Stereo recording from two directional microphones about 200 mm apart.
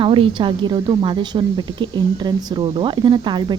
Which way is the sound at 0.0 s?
25° right (ahead or behind).